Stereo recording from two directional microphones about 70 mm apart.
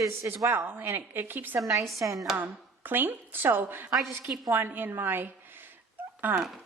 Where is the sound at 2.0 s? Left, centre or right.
Right.